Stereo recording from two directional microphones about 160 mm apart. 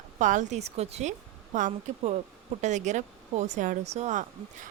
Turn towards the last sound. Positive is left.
turn(degrees=-45)  # may be behind; listen again after turning